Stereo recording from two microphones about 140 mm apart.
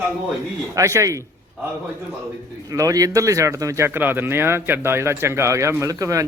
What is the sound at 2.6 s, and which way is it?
Speech, 25° right (ahead or behind).